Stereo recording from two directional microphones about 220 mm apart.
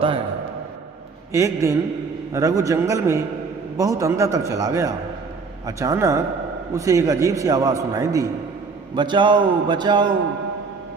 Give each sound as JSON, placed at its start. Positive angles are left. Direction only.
{"t": 1.3, "sound": "a man's voice", "side_deg": -15}